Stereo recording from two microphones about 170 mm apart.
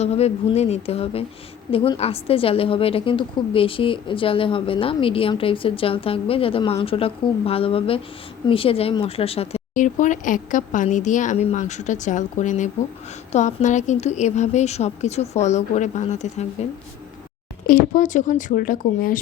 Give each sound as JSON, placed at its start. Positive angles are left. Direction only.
{"t": 0.0, "sound": "a woman's voice", "side_deg": 40}
{"t": 17.7, "sound": "speech", "side_deg": 55}